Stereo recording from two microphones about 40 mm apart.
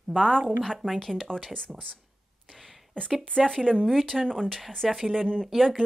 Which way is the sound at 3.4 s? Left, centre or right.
Centre.